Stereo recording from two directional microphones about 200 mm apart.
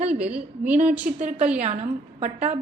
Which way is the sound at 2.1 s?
35° right (ahead or behind).